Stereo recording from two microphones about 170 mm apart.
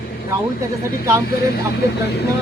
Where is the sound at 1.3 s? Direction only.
65° left (ahead or behind).